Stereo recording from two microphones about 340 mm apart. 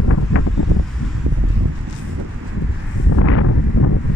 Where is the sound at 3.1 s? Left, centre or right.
Left.